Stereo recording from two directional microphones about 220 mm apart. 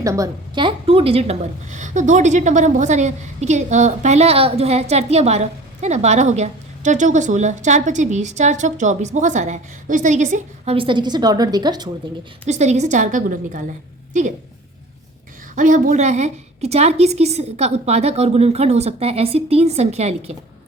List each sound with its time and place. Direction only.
0.0 s a woman's voice: 15° right (ahead or behind)
12.5 s a woman's voice: 30° right (ahead or behind)
15.5 s a woman's voice: 35° right (ahead or behind)